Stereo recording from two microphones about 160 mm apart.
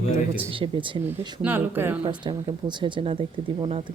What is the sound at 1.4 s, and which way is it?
Speech, 10° right (ahead or behind).